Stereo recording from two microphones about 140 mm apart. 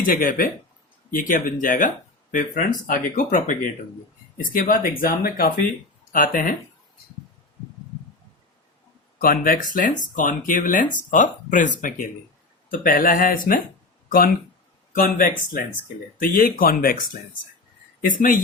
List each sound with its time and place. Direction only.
0.0 s speech: 75° left (ahead or behind)
6.1 s speech: 80° left
9.1 s speech: 90° left; by 12.0 s 70° left (ahead or behind)
12.7 s speech: 90° left
14.9 s speech: 85° left
18.0 s speech: 75° left (ahead or behind)